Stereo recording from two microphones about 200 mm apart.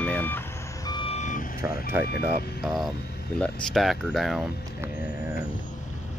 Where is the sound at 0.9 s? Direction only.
30° left (ahead or behind).